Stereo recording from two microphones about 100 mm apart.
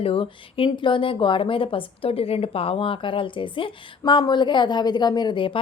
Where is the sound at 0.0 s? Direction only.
70° left (ahead or behind).